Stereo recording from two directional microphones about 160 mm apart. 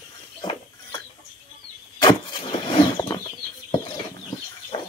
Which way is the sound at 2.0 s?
25° left (ahead or behind).